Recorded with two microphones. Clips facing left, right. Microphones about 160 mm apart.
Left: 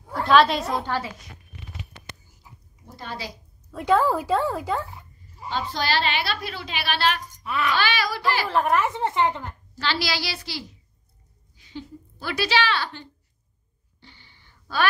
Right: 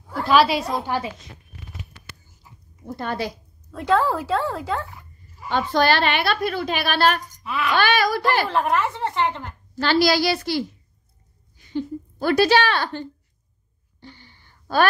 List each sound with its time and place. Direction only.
0.2 s a woman's voice: 5° right (ahead or behind)
0.8 s a woman's voice: 15° right (ahead or behind)
2.8 s a woman's voice: 55° right (ahead or behind)
3.7 s speech: 10° left (ahead or behind)
5.5 s a woman's voice: 55° right (ahead or behind)
7.4 s a woman's voice: 5° right (ahead or behind)
7.7 s a woman's voice: 50° right (ahead or behind)
8.5 s a woman's voice: centre (ahead or behind)
8.8 s speech: 15° left (ahead or behind)
9.8 s a woman's voice: 45° right (ahead or behind)
14.0 s a sound: 45° right (ahead or behind)